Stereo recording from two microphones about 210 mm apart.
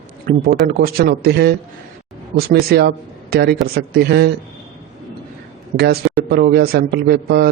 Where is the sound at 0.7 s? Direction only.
45° right (ahead or behind).